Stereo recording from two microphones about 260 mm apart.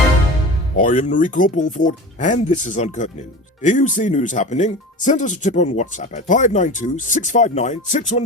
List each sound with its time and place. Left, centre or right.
0.8 s speech: left